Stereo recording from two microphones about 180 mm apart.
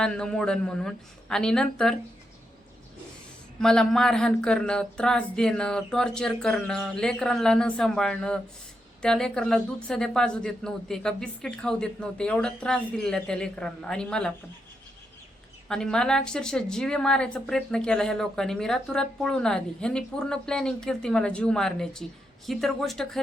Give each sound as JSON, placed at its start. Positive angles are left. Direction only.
{"t": 0.0, "sound": "speech", "side_deg": 5}
{"t": 3.6, "sound": "speech", "side_deg": 5}
{"t": 15.7, "sound": "speech", "side_deg": 5}